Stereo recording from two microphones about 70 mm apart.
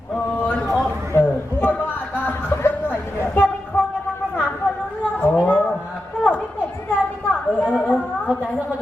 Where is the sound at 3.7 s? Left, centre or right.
Left.